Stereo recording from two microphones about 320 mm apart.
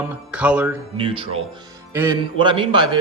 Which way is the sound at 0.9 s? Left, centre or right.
Centre.